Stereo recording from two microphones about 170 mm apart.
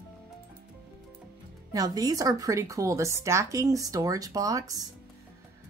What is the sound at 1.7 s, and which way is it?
Speech, 20° right (ahead or behind).